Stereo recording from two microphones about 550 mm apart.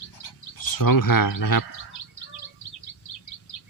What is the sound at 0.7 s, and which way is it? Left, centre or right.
Speech, left.